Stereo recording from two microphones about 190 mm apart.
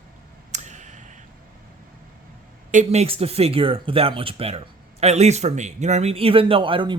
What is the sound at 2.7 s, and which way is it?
Speech, 35° right (ahead or behind).